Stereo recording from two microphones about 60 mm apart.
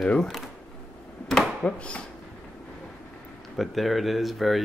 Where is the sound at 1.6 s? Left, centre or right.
Centre.